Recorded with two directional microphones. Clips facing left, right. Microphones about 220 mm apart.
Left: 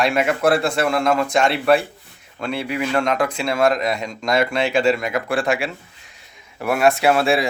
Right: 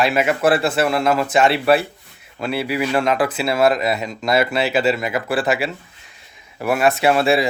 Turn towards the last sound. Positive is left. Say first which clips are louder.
# right 1 dB
turn(degrees=0)  # may be behind; listen again after turning